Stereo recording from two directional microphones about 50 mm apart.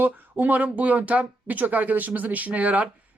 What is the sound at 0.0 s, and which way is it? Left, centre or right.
Speech, right.